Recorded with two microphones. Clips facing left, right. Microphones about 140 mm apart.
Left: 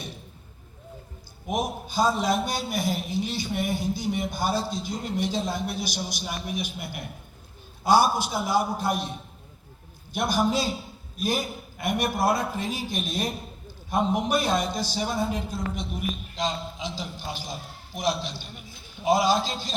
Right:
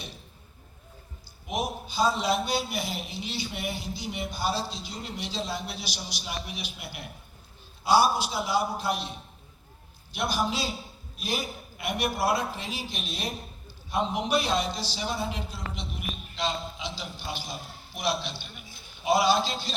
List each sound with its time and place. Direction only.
1.5 s a man's voice: 45° left (ahead or behind)